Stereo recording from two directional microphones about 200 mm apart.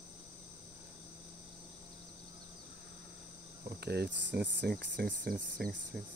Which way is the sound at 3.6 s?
55° right (ahead or behind).